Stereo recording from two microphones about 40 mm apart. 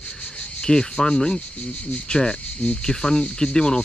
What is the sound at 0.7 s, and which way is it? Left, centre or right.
Speech, centre.